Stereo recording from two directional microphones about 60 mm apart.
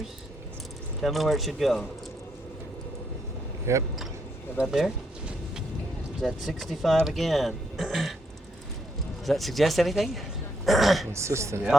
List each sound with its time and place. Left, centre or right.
1.0 s speech: centre
3.7 s speech: right
4.6 s speech: centre
6.1 s speech: centre
9.2 s speech: centre
11.1 s speech: right